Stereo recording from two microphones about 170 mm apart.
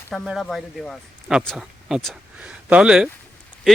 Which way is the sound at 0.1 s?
Centre (ahead or behind).